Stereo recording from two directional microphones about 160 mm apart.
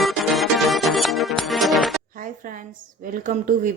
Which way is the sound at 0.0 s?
Centre (ahead or behind).